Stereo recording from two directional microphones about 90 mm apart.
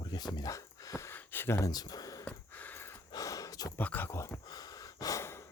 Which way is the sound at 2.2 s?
20° left (ahead or behind).